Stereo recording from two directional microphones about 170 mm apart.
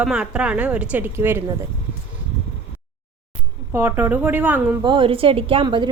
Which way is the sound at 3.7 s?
15° right (ahead or behind).